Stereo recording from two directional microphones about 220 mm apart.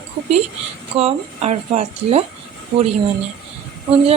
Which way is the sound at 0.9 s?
25° right (ahead or behind).